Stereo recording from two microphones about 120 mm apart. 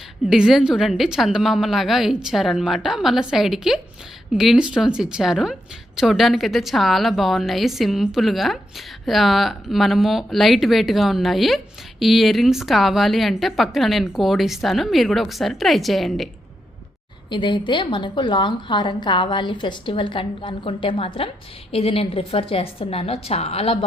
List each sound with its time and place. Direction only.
0.3 s speech: 5° right (ahead or behind)
17.2 s a woman's voice: 40° left (ahead or behind)